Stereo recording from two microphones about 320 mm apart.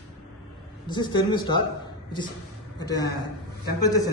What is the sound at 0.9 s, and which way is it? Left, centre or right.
Speech, centre.